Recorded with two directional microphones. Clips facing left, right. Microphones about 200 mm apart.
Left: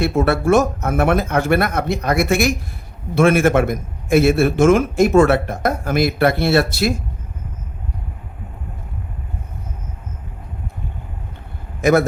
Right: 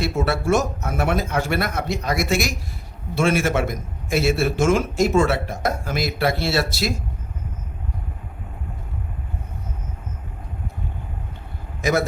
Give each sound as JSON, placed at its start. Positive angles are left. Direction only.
{"t": 0.0, "sound": "a man's voice", "side_deg": 55}
{"t": 11.8, "sound": "a man's voice", "side_deg": 55}